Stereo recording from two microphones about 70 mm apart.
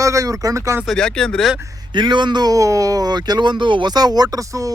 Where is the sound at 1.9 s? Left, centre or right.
Right.